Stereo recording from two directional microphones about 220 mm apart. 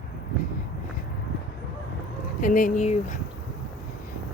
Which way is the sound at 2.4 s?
35° left (ahead or behind).